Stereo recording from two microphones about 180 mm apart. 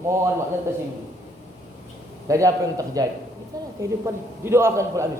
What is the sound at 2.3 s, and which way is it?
A man's voice, 20° right (ahead or behind).